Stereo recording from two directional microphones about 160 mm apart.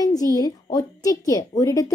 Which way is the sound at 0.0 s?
20° left (ahead or behind).